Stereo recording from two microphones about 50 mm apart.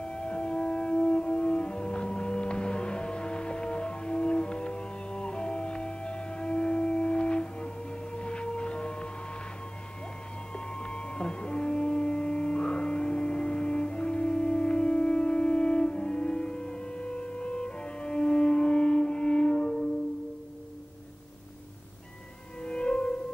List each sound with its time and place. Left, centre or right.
0.0 s music: centre
10.5 s music: centre
22.6 s music: centre